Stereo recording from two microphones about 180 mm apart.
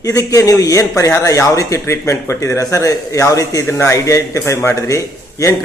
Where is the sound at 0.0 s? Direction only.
20° left (ahead or behind).